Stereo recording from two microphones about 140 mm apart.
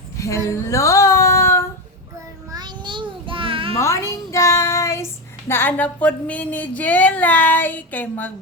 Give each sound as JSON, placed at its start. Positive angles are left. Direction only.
{"t": 0.2, "sound": "a woman's voice", "side_deg": 20}
{"t": 0.5, "sound": "music", "side_deg": 20}
{"t": 2.5, "sound": "child singing", "side_deg": -30}
{"t": 3.8, "sound": "a sound", "side_deg": 20}
{"t": 5.5, "sound": "speech", "side_deg": 15}